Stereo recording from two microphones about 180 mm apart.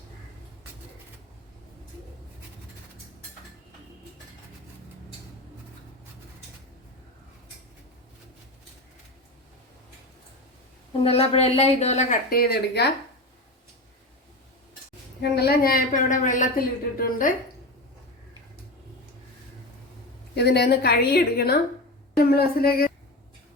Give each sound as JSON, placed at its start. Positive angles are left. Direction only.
{"t": 11.0, "sound": "speech", "side_deg": 35}
{"t": 15.2, "sound": "a woman's voice", "side_deg": 60}
{"t": 20.3, "sound": "a woman's voice", "side_deg": 65}